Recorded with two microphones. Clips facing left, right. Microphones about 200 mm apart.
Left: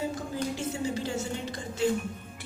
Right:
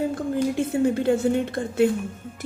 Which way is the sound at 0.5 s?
55° right (ahead or behind).